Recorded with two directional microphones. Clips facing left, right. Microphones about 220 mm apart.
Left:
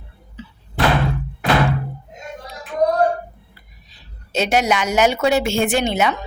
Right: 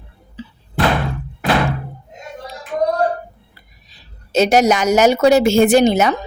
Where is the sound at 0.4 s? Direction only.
30° right (ahead or behind).